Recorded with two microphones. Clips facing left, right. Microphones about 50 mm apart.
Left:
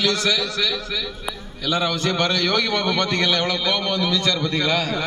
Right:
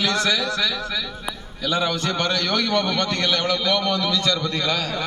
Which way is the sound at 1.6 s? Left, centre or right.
Centre.